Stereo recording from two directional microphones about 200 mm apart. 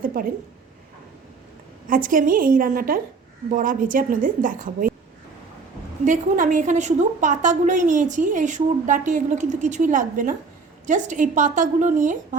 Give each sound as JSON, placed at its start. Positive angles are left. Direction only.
{"t": 0.0, "sound": "a woman's voice", "side_deg": -45}
{"t": 1.9, "sound": "a woman's voice", "side_deg": -45}
{"t": 6.1, "sound": "a woman's voice", "side_deg": -40}